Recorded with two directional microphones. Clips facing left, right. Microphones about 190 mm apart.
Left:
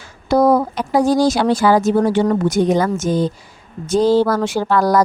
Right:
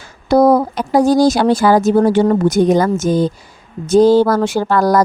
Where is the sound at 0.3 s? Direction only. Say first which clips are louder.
Right 3 dB; 40° right (ahead or behind).